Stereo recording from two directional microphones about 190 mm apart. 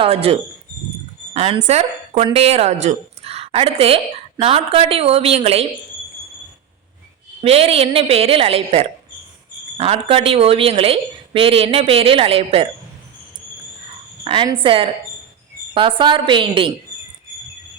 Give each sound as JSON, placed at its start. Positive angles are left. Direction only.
{"t": 0.0, "sound": "a woman's voice", "side_deg": -30}
{"t": 7.4, "sound": "a woman's voice", "side_deg": -30}
{"t": 14.3, "sound": "a woman's voice", "side_deg": -25}